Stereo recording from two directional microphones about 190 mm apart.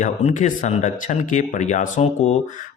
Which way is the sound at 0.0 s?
35° left (ahead or behind).